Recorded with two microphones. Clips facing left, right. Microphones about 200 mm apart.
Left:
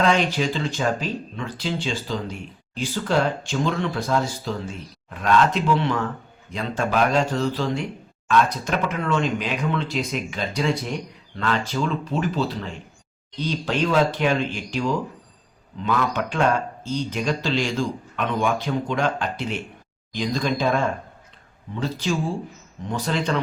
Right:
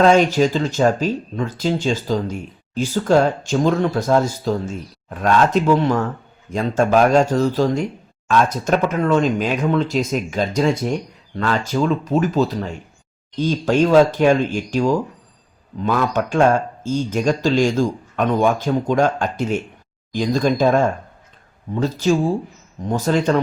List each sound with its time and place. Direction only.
0.0 s speech: 45° right (ahead or behind)